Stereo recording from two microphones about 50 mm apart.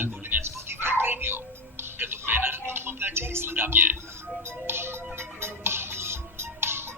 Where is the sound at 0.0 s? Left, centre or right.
Right.